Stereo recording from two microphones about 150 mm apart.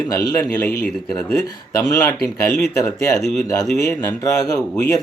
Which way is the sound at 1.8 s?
25° left (ahead or behind).